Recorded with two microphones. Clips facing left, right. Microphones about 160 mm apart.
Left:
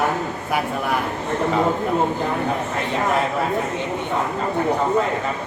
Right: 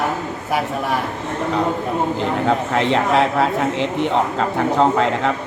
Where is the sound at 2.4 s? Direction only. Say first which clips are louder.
Right 6 dB; 90° right.